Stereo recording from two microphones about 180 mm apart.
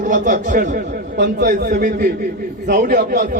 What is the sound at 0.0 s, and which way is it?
A man's voice, 45° right (ahead or behind).